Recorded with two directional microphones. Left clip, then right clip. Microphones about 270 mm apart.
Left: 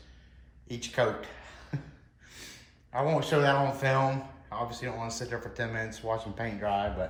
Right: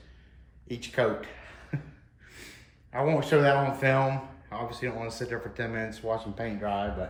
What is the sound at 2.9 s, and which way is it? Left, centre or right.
Speech, centre.